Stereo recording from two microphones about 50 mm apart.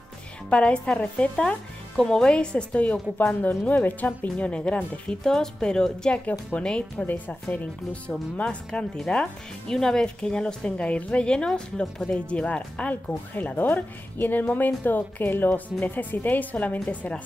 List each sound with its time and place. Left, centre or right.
0.5 s a woman's voice: left
8.4 s a woman's voice: left
8.9 s a woman's voice: centre; by 17.2 s left